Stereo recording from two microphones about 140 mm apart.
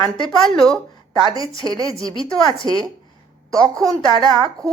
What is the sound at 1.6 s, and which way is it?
Speech, 30° right (ahead or behind).